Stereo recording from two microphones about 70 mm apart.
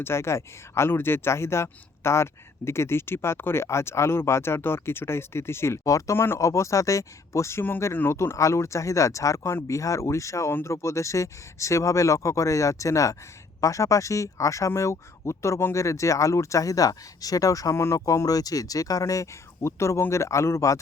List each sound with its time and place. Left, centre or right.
0.0 s speech: left
5.8 s speech: left
6.1 s speech: left
17.7 s speech: left
18.0 s speech: left